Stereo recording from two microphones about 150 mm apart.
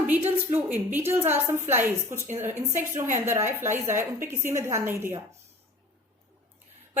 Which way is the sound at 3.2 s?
15° right (ahead or behind).